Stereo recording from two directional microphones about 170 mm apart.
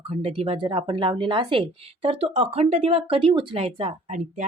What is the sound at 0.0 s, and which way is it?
A woman's voice, 35° right (ahead or behind).